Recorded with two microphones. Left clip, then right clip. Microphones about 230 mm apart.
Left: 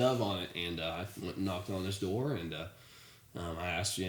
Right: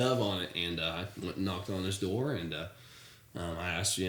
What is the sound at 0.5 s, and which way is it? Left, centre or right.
Speech, centre.